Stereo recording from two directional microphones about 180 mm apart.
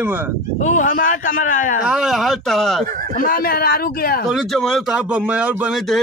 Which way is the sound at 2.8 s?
50° right (ahead or behind).